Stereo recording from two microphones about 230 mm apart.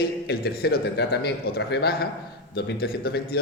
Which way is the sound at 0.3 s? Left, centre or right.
Left.